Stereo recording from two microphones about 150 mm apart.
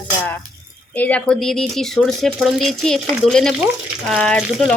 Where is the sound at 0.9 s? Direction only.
10° left (ahead or behind).